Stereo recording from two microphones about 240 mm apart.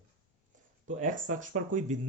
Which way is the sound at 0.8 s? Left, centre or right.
Right.